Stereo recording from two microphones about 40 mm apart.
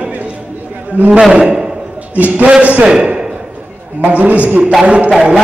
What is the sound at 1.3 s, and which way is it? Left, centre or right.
Speech, right.